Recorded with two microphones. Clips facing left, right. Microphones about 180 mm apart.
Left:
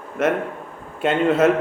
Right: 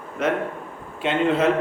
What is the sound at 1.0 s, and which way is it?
Speech, 45° left (ahead or behind).